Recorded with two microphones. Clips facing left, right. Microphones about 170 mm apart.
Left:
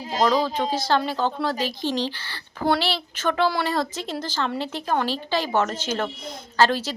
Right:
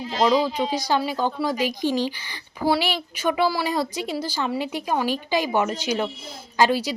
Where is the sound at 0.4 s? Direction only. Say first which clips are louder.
Even; 10° right (ahead or behind).